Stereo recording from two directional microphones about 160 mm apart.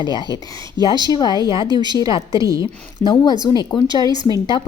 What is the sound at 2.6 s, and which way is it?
Speech, 30° left (ahead or behind).